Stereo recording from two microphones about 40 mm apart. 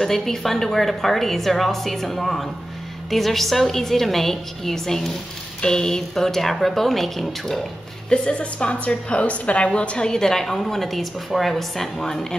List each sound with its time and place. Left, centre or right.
0.0 s a woman's voice: centre
8.1 s a woman's voice: left
9.9 s a woman's voice: centre